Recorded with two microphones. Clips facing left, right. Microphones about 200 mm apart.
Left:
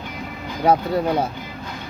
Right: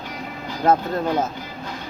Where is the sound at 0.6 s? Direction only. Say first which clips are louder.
Left 1 dB; 10° left (ahead or behind).